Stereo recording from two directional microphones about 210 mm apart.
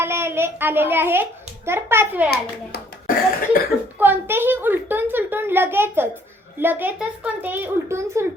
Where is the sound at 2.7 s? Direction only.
50° left (ahead or behind).